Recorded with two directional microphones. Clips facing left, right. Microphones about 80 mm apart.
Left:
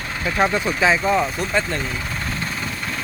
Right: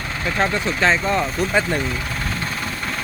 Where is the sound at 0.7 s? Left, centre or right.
Centre.